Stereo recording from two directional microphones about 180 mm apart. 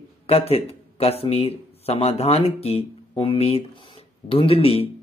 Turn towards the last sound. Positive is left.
turn(degrees=35)  # may be behind; listen again after turning